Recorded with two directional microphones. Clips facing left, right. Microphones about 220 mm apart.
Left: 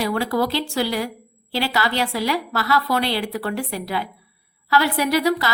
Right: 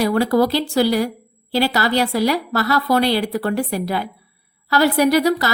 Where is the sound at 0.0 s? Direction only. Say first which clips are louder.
Right 5 dB; 40° right (ahead or behind).